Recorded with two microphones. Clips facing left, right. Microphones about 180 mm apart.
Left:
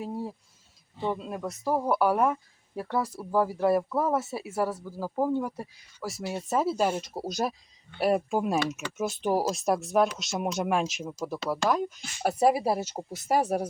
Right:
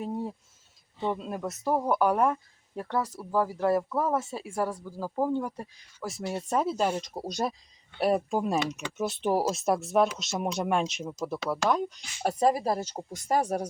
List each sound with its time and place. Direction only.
0.0 s speech: centre (ahead or behind)